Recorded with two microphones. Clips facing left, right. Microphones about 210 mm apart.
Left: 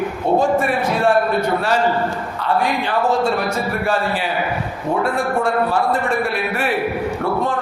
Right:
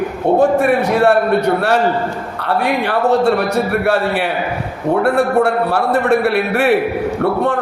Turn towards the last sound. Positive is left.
turn(degrees=-65)  # may be behind; listen again after turning